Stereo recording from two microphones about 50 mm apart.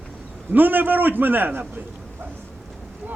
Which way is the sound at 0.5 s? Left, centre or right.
Right.